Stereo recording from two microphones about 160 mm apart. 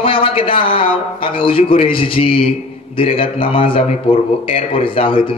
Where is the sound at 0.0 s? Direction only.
35° left (ahead or behind).